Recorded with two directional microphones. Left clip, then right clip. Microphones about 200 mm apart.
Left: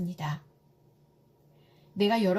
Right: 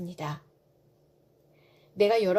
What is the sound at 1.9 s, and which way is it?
Speech, 35° right (ahead or behind).